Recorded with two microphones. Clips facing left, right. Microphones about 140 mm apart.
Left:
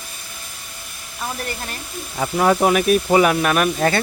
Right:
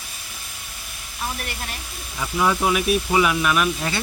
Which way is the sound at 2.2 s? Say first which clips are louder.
Left 5 dB; 45° left (ahead or behind).